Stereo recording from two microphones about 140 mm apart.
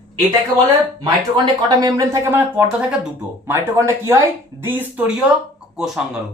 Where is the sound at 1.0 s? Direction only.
30° right (ahead or behind); by 5.1 s 15° right (ahead or behind).